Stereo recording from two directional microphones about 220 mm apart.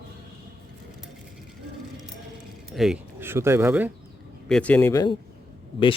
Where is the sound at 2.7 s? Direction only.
Centre (ahead or behind).